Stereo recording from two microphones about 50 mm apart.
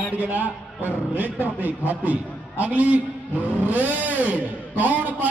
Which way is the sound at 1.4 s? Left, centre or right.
Right.